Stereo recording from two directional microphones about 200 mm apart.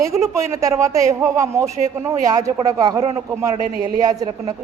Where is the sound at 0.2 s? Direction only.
15° right (ahead or behind).